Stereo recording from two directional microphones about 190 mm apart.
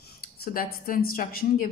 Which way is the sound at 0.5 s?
50° left (ahead or behind).